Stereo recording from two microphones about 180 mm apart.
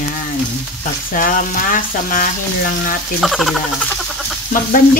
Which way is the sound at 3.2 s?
Centre (ahead or behind).